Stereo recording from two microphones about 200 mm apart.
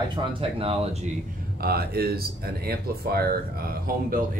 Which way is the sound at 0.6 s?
30° right (ahead or behind).